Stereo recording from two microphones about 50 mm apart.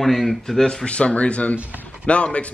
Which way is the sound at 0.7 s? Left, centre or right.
Centre.